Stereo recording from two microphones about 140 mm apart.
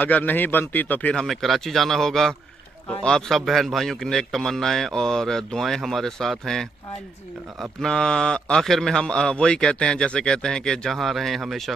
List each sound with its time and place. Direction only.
0.0 s speech: 10° left (ahead or behind)
1.2 s a man's voice: centre (ahead or behind)
7.8 s a man's voice: 5° left (ahead or behind)